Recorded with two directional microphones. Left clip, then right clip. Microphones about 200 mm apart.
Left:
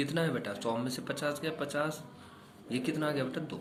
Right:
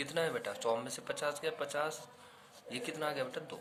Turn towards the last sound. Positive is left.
turn(degrees=-35)  # may be behind; listen again after turning